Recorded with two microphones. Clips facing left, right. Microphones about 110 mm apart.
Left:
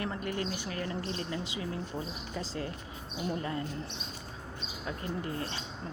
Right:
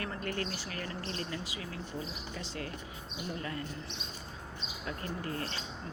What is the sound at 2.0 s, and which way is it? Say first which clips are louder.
Speech: left 3 dB; 35° left (ahead or behind).